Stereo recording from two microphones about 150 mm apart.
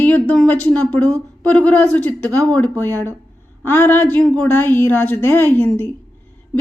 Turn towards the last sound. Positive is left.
turn(degrees=15)  # may be behind; listen again after turning